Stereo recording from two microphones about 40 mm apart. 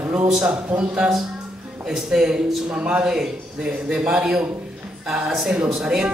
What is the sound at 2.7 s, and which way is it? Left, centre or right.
Speech, right.